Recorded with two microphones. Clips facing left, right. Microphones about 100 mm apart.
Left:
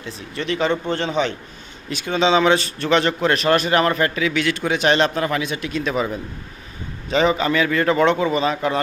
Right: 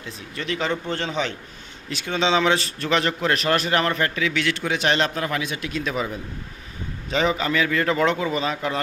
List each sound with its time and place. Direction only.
0.3 s a man's voice: 25° left (ahead or behind)
7.1 s a man's voice: 30° left (ahead or behind)